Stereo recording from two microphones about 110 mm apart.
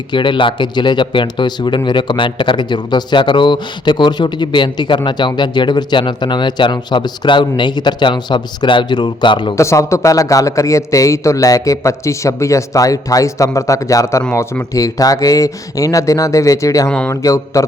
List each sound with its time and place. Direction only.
0.1 s speech: 45° left (ahead or behind)
9.6 s a man's voice: 25° left (ahead or behind)